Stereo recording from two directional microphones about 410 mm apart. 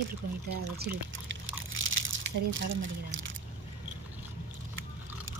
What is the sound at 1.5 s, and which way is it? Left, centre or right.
Crumpling, right.